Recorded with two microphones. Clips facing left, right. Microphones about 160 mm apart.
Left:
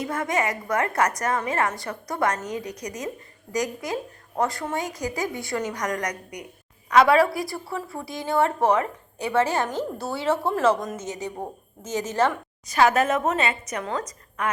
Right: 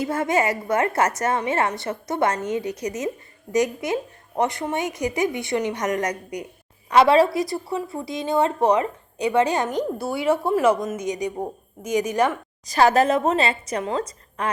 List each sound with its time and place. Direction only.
0.0 s a woman's voice: 30° right (ahead or behind)
12.6 s a woman's voice: 35° right (ahead or behind)